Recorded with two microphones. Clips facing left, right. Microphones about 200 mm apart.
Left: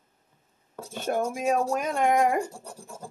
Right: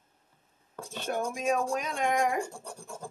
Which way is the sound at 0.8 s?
10° left (ahead or behind).